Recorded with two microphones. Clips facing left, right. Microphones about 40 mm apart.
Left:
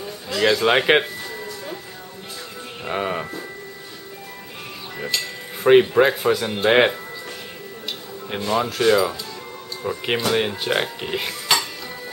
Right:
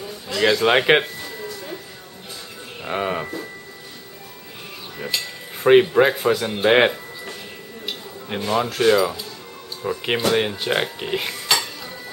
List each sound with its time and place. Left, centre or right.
0.0 s music: centre
2.8 s speech: centre
5.1 s speech: centre
9.8 s dishes: centre